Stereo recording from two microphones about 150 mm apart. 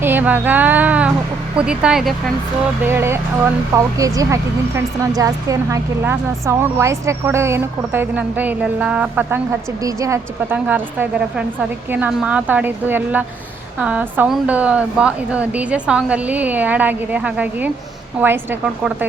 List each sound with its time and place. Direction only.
0.0 s speech: 10° right (ahead or behind)
2.8 s a woman's voice: 15° right (ahead or behind)